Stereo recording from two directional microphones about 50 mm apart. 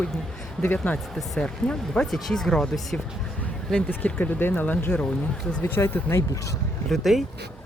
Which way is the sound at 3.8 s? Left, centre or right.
Left.